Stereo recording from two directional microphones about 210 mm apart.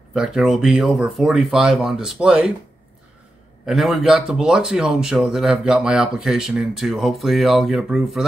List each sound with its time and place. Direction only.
0.1 s speech: centre (ahead or behind)
3.6 s speech: centre (ahead or behind)